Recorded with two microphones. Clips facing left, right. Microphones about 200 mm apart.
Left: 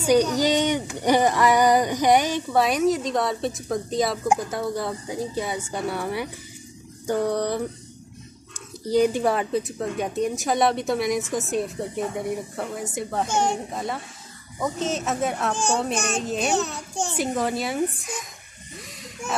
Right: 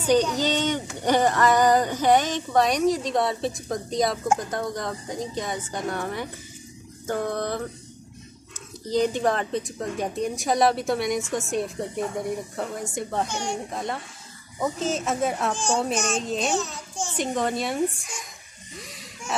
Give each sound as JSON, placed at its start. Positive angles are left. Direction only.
{"t": 0.0, "sound": "speech", "side_deg": 10}
{"t": 16.4, "sound": "a child's voice", "side_deg": 65}
{"t": 17.2, "sound": "speech", "side_deg": 5}
{"t": 18.8, "sound": "a sound", "side_deg": 0}